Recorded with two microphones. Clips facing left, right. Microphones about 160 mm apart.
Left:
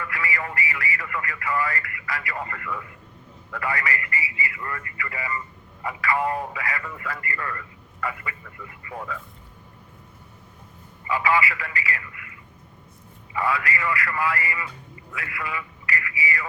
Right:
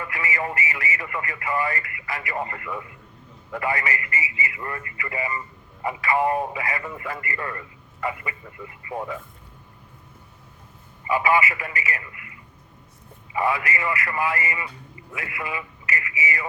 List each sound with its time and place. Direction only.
0.0 s speech: 20° right (ahead or behind)
11.0 s a man's voice: 20° right (ahead or behind)